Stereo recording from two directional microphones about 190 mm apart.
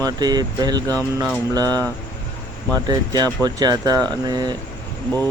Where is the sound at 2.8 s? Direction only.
20° right (ahead or behind).